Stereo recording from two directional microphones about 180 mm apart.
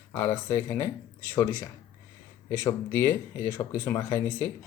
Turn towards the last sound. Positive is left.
turn(degrees=15)  # may be behind; listen again after turning